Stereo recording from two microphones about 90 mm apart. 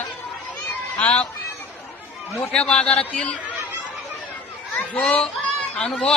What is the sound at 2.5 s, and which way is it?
Speech, 10° left (ahead or behind).